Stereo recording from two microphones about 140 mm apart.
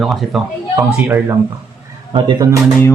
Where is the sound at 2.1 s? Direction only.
35° right (ahead or behind).